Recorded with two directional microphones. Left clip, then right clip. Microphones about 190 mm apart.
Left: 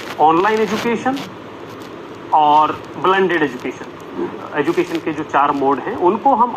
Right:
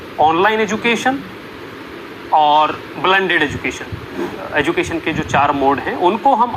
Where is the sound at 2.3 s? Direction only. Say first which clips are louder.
Even; 30° right (ahead or behind).